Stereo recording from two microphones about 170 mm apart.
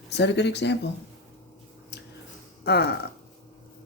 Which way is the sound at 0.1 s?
90° left.